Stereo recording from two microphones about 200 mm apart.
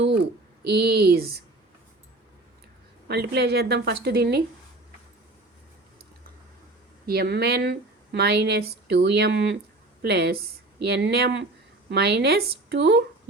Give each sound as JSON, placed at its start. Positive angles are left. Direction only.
{"t": 0.7, "sound": "speech", "side_deg": -50}
{"t": 3.1, "sound": "speech", "side_deg": -55}
{"t": 7.0, "sound": "speech", "side_deg": -50}